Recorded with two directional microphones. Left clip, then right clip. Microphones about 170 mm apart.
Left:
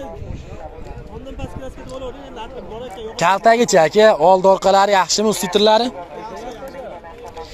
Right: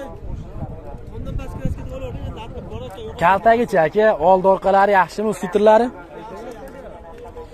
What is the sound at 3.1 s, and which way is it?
Speech, 5° left (ahead or behind).